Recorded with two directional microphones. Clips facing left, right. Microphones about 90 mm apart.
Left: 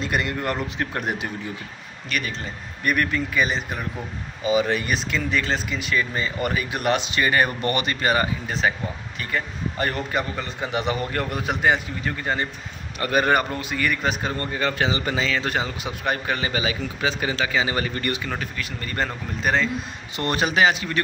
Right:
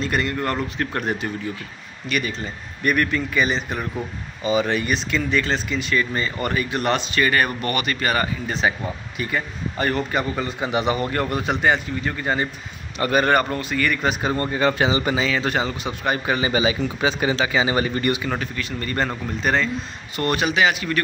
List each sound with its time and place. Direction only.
0.0 s speech: 15° left (ahead or behind)
2.0 s a man's voice: centre (ahead or behind); by 8.3 s 20° left (ahead or behind)
8.5 s a man's voice: centre (ahead or behind)
13.3 s speech: 10° left (ahead or behind)
14.3 s a man's voice: 20° right (ahead or behind)
15.1 s a man's voice: 10° right (ahead or behind)
16.3 s a man's voice: 15° right (ahead or behind)
18.6 s a man's voice: 5° left (ahead or behind)
20.2 s speech: 30° left (ahead or behind)